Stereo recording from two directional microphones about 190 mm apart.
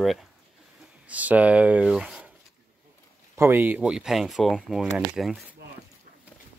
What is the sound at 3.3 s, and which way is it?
Speech, 10° right (ahead or behind).